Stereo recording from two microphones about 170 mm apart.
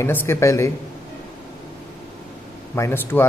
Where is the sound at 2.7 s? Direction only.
15° left (ahead or behind).